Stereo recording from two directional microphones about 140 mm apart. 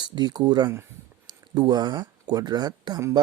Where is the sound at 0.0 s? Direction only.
30° right (ahead or behind).